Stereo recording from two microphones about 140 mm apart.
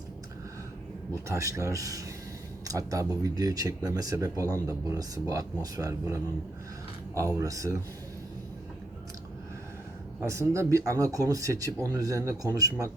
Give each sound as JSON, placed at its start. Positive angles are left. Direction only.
{"t": 1.1, "sound": "speech", "side_deg": -20}
{"t": 7.3, "sound": "speech", "side_deg": -25}
{"t": 10.2, "sound": "speech", "side_deg": -20}